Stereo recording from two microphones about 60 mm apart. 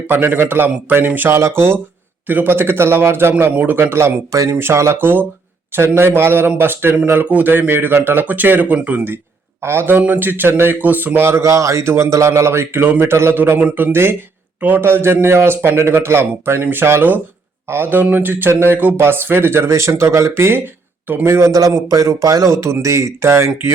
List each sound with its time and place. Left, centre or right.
0.1 s speech: right
1.4 s a man's voice: right
2.2 s speech: right
3.5 s a man's voice: right
4.9 s a man's voice: right
9.6 s speech: right
11.3 s a man's voice: right
13.3 s a man's voice: right
16.6 s a man's voice: right
21.8 s speech: right